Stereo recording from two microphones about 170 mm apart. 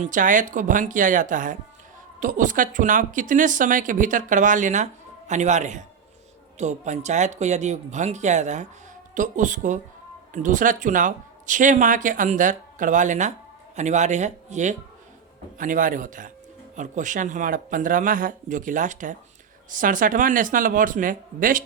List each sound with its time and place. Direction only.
0.0 s speech: 50° right (ahead or behind)